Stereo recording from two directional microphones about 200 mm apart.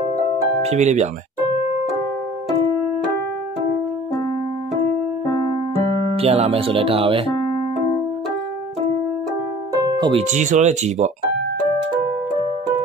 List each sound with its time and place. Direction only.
0.7 s speech: 35° right (ahead or behind)
6.1 s speech: 30° right (ahead or behind)
9.8 s music: 20° right (ahead or behind)
10.1 s speech: 35° right (ahead or behind)